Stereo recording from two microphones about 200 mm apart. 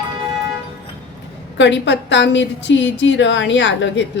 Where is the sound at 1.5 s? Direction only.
65° left (ahead or behind).